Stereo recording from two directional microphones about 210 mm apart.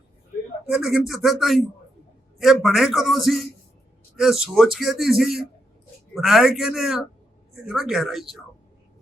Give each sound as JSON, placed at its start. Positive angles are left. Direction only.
{"t": 0.7, "sound": "speech", "side_deg": 0}